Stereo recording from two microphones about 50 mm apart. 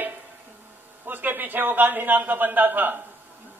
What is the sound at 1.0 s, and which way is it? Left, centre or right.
A man's voice, right.